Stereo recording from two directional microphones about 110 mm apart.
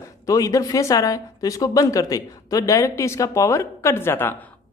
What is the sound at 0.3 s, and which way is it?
Speech, 30° left (ahead or behind).